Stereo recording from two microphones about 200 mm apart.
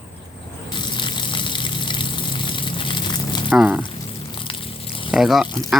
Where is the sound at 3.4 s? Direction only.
5° right (ahead or behind).